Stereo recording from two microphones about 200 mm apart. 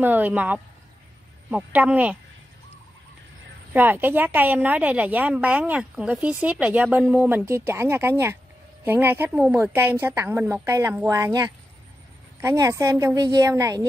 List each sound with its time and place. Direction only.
0.0 s a woman's voice: 10° right (ahead or behind)
3.7 s a woman's voice: 10° right (ahead or behind)